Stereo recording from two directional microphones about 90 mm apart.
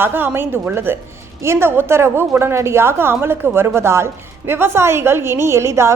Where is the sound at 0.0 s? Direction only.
25° right (ahead or behind).